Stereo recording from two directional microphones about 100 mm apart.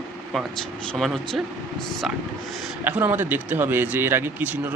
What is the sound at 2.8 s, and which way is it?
Speech, 20° right (ahead or behind).